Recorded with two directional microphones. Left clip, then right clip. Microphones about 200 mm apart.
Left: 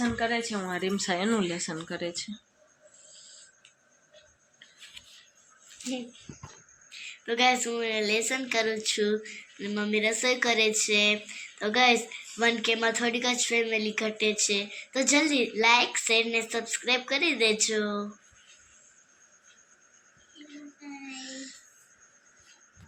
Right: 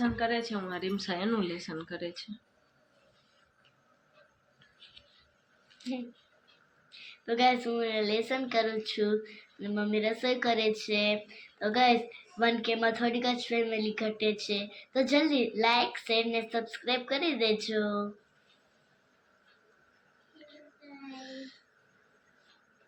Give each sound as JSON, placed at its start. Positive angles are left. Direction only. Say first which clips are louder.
{"t": 0.2, "sound": "speech", "louder": "left 2 dB", "side_deg": 35}
{"t": 6.9, "sound": "a woman's voice", "louder": "left 2 dB", "side_deg": -5}
{"t": 21.2, "sound": "a sound", "louder": "left 3 dB", "side_deg": 45}